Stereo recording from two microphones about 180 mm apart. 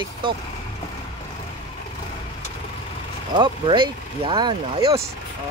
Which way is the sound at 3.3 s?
25° right (ahead or behind).